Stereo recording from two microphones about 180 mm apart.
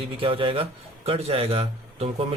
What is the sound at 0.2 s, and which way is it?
A man's voice, 30° right (ahead or behind).